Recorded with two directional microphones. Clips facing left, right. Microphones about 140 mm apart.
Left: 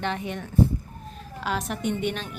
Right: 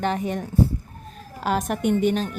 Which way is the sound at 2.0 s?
40° right (ahead or behind).